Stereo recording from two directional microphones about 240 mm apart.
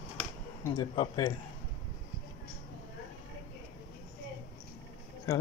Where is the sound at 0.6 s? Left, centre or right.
Centre.